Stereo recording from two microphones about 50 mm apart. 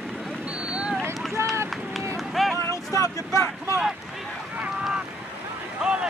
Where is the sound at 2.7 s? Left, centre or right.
Left.